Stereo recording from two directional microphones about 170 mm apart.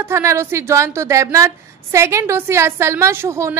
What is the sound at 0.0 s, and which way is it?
A woman's voice, 15° right (ahead or behind).